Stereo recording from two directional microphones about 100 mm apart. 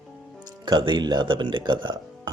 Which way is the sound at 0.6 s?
50° right (ahead or behind).